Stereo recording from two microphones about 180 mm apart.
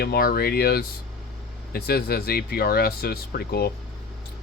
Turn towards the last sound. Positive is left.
turn(degrees=60)  # may be behind; listen again after turning